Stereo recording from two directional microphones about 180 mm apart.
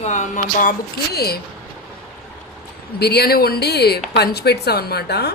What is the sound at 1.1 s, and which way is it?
Speech, 60° left (ahead or behind).